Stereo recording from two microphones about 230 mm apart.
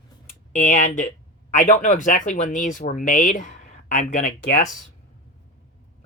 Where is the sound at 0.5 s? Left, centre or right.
Left.